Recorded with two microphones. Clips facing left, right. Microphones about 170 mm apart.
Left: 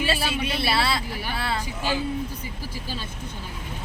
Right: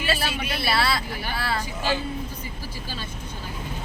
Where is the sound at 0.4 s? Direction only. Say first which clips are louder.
Right 1 dB; 25° left (ahead or behind).